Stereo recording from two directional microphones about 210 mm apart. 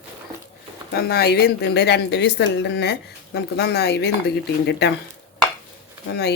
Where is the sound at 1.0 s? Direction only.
50° left (ahead or behind).